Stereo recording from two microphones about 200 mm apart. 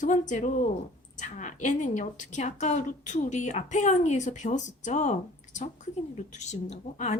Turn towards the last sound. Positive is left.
turn(degrees=35)  # may be behind; listen again after turning